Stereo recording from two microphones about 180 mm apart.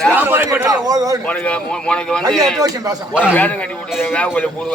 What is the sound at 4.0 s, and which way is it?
Speech, 10° left (ahead or behind).